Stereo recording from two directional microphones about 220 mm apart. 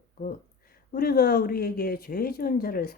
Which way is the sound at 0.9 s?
45° left (ahead or behind).